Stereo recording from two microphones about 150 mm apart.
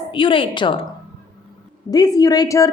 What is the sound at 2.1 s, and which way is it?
Speech, 25° left (ahead or behind).